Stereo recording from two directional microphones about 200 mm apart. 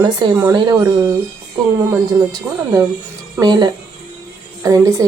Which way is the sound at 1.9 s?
15° right (ahead or behind).